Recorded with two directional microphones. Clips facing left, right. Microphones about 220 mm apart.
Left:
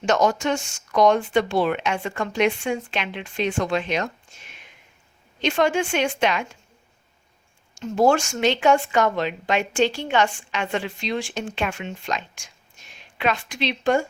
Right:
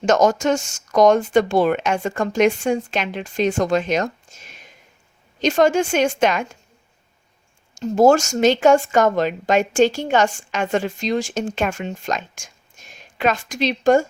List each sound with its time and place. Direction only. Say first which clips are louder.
0.0 s speech: right 4 dB; 45° right (ahead or behind)
7.8 s speech: right 5 dB; 45° right (ahead or behind)